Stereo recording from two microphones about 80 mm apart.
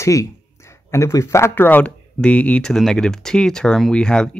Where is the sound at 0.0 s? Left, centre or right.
Left.